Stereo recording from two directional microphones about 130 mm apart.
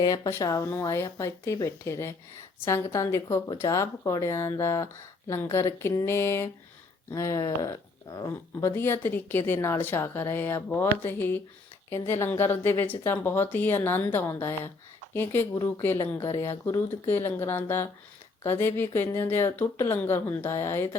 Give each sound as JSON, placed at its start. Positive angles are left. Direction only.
{"t": 0.3, "sound": "speech", "side_deg": 25}